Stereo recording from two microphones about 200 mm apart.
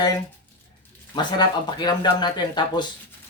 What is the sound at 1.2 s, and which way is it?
Speech, 20° left (ahead or behind).